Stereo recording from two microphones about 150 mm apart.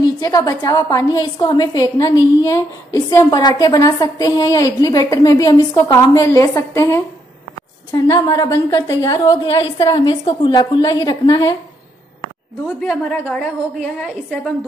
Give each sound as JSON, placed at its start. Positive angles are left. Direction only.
{"t": 0.0, "sound": "a woman's voice", "side_deg": 25}
{"t": 13.1, "sound": "a woman's voice", "side_deg": 5}